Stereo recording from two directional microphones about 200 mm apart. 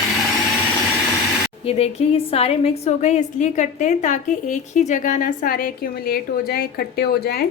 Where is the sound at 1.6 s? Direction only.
30° left (ahead or behind).